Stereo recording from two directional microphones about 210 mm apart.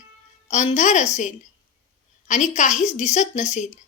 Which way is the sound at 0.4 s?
30° left (ahead or behind).